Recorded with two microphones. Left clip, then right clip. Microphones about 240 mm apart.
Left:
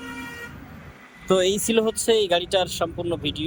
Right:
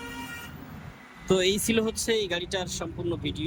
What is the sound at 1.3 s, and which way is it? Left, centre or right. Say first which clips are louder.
Speech: left 4 dB; centre.